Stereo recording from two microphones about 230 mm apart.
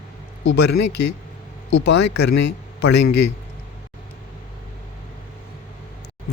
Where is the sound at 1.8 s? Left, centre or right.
Left.